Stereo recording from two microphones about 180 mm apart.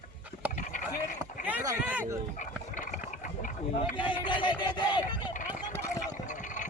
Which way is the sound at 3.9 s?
25° left (ahead or behind).